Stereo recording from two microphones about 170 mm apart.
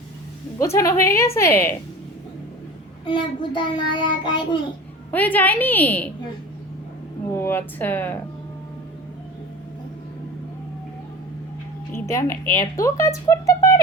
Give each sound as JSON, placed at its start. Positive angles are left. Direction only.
{"t": 0.6, "sound": "a woman's voice", "side_deg": 20}
{"t": 3.1, "sound": "child singing", "side_deg": 30}
{"t": 5.1, "sound": "a woman's voice", "side_deg": 10}
{"t": 7.3, "sound": "a woman's voice", "side_deg": 15}
{"t": 11.9, "sound": "music", "side_deg": 15}
{"t": 12.3, "sound": "speech", "side_deg": 50}
{"t": 12.7, "sound": "child singing", "side_deg": 20}